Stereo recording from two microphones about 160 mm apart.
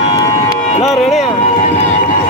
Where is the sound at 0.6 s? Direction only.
45° left (ahead or behind).